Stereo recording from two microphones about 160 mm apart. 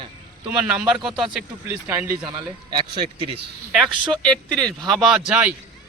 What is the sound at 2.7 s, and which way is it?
Speech, 30° right (ahead or behind).